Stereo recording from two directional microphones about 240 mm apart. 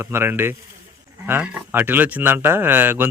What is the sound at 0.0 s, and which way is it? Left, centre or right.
Speech, centre.